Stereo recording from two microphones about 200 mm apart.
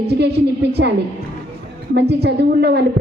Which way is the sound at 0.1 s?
55° right (ahead or behind).